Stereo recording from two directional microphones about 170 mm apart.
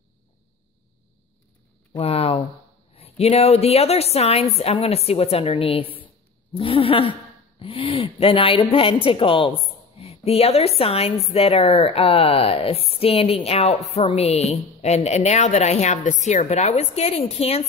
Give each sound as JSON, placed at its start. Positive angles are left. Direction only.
{"t": 2.0, "sound": "speech", "side_deg": 35}